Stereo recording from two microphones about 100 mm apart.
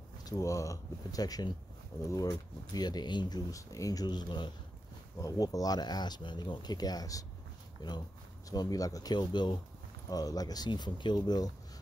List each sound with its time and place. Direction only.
0.2 s speech: 35° left (ahead or behind)
3.5 s speech: 35° left (ahead or behind)
5.2 s speech: 35° left (ahead or behind)
8.5 s speech: 35° left (ahead or behind)